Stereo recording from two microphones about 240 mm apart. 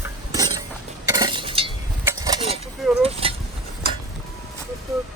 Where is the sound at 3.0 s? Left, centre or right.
Right.